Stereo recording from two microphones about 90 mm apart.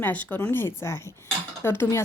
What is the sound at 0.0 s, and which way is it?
A woman's voice, 20° left (ahead or behind).